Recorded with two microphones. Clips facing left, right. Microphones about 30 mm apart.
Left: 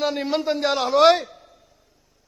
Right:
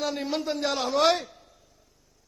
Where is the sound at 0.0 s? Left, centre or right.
Left.